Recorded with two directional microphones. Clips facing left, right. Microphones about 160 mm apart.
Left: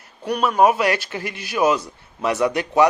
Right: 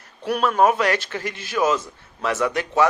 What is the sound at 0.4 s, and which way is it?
A man's voice, 10° left (ahead or behind).